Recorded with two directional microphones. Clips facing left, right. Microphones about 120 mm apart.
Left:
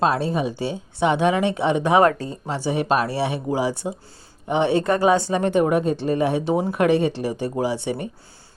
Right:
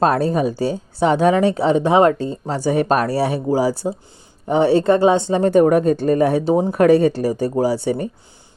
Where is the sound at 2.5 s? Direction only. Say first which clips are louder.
Right 4 dB; 45° right (ahead or behind).